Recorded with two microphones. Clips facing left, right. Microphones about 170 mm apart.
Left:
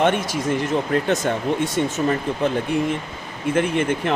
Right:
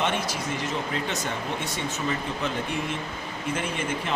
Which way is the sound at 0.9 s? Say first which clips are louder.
Left 9 dB; 50° left (ahead or behind).